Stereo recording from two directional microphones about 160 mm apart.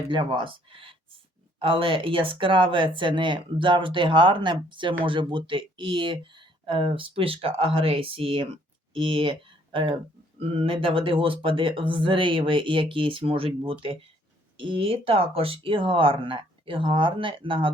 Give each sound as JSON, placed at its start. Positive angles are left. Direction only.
{"t": 0.1, "sound": "speech", "side_deg": -30}